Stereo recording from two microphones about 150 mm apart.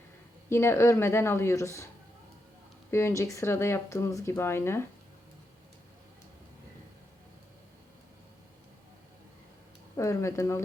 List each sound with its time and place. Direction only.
0.5 s speech: 15° left (ahead or behind)
2.9 s speech: 20° left (ahead or behind)
10.0 s speech: 20° left (ahead or behind)